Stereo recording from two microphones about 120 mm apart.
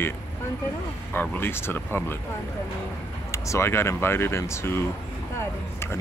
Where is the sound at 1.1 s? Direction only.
20° left (ahead or behind).